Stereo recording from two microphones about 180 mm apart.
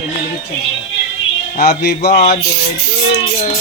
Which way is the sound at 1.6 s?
65° left (ahead or behind).